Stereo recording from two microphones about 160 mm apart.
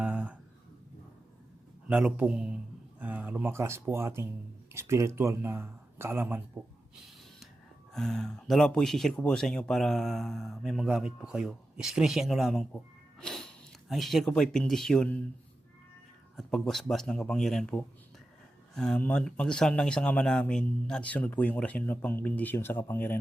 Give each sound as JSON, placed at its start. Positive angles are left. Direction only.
{"t": 0.0, "sound": "a sound", "side_deg": -10}
{"t": 1.9, "sound": "speech", "side_deg": -5}
{"t": 16.4, "sound": "speech", "side_deg": 0}